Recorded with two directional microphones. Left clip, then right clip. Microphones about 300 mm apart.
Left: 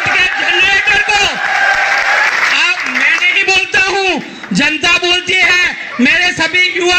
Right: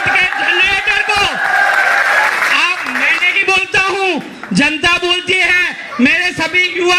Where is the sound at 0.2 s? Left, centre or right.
Left.